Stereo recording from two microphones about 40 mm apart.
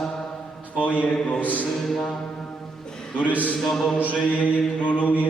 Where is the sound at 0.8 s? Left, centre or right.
Left.